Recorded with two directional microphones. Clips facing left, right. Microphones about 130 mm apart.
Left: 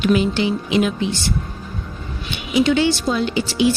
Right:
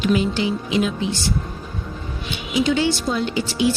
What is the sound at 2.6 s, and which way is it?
Speech, 60° left (ahead or behind).